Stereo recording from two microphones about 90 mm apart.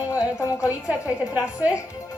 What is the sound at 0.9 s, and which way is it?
Speech, 15° right (ahead or behind).